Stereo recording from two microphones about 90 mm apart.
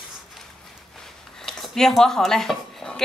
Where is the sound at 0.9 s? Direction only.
5° left (ahead or behind).